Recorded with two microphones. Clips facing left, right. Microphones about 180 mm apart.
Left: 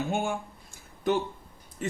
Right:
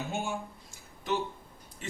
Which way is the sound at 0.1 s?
55° left (ahead or behind).